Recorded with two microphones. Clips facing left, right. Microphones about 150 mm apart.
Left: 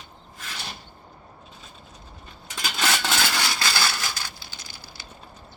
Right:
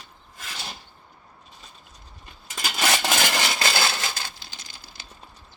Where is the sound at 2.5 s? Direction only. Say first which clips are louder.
Right 1 dB; 5° right (ahead or behind); by 4.0 s 25° right (ahead or behind).